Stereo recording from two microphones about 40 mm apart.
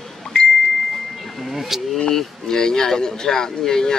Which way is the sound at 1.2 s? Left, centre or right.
Centre.